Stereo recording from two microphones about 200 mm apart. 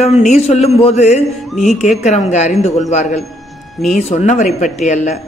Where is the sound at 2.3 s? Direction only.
35° left (ahead or behind).